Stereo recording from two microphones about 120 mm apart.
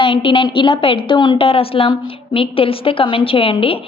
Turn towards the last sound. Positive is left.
turn(degrees=50)  # may be behind; listen again after turning